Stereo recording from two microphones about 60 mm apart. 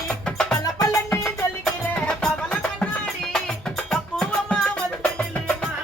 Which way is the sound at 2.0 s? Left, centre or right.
Centre.